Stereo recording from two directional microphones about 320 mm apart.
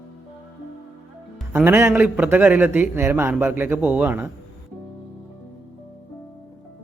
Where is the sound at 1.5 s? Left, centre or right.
Centre.